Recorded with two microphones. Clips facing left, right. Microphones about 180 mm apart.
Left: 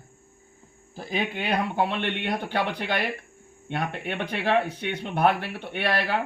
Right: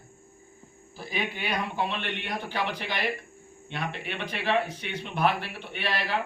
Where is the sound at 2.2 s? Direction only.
60° left (ahead or behind).